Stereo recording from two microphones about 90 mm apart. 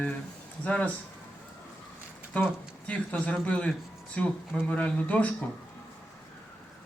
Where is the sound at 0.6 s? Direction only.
15° left (ahead or behind).